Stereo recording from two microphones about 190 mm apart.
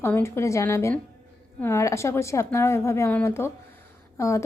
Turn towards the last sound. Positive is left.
turn(degrees=15)  # may be behind; listen again after turning